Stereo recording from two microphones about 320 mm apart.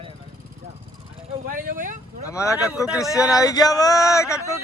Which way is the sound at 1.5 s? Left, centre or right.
Right.